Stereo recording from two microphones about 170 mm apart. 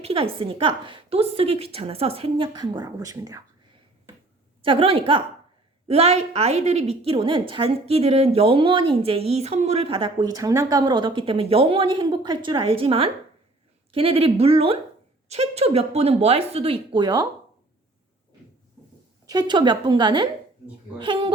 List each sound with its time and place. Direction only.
0.0 s a woman's voice: 35° right (ahead or behind)
4.6 s a woman's voice: 30° right (ahead or behind)
19.3 s a woman's voice: 25° right (ahead or behind)